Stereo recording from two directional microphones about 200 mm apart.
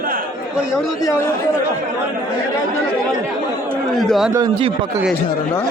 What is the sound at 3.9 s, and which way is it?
Speech, centre (ahead or behind).